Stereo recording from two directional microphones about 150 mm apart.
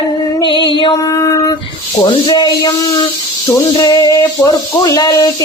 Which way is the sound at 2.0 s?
30° left (ahead or behind).